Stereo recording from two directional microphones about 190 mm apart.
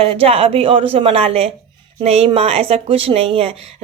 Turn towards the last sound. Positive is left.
turn(degrees=-35)  # may be behind; listen again after turning